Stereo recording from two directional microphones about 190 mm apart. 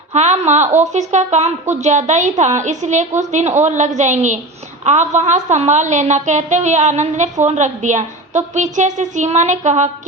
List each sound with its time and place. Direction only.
0.1 s a woman's voice: 35° right (ahead or behind)